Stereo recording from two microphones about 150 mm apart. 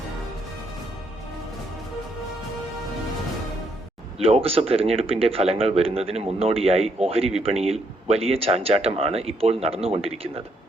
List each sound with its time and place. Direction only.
4.2 s speech: 40° right (ahead or behind)